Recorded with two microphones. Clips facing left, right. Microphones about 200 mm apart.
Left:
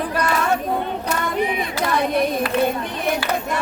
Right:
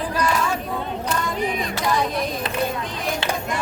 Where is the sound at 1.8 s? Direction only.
60° left (ahead or behind).